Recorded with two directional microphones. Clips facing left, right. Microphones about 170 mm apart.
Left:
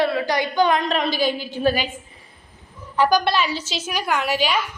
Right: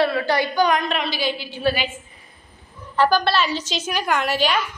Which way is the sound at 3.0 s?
15° left (ahead or behind).